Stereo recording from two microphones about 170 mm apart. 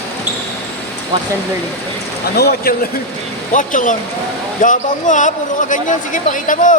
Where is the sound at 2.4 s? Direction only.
65° left (ahead or behind).